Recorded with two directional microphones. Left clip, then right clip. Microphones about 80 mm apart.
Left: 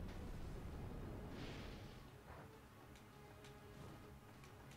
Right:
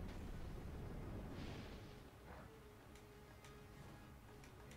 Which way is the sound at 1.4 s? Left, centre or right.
Centre.